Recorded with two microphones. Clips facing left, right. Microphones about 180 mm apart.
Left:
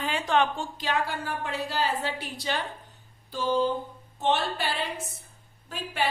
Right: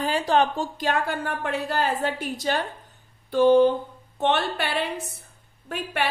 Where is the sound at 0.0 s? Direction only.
35° right (ahead or behind).